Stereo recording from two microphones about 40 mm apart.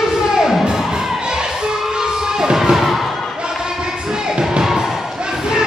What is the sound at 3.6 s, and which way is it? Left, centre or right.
Music, centre.